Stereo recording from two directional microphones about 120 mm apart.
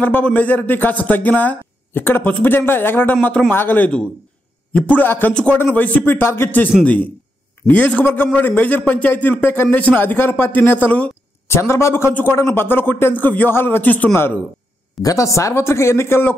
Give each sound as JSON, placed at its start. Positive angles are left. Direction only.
{"t": 0.0, "sound": "speech", "side_deg": 15}
{"t": 15.0, "sound": "speech", "side_deg": 30}